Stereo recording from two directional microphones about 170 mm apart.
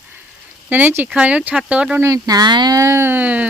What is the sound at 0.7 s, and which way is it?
Speech, 10° right (ahead or behind).